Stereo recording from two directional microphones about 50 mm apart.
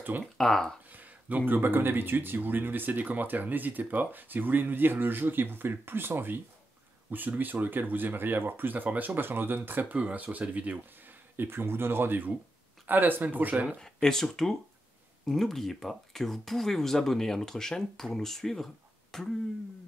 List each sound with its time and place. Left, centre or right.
0.4 s speech: centre
0.9 s speech: right
11.3 s speech: right
13.7 s speech: centre